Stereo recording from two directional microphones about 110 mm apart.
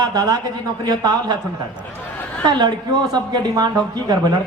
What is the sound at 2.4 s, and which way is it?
A man's voice, 40° right (ahead or behind).